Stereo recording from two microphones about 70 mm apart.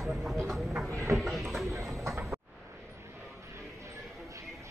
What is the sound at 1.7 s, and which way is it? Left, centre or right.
Tick-tock, right.